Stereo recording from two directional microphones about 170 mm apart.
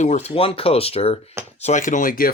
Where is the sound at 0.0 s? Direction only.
40° left (ahead or behind).